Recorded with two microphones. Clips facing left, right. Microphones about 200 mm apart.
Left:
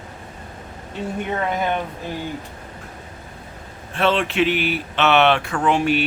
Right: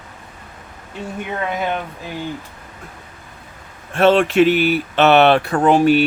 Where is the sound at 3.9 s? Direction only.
45° right (ahead or behind).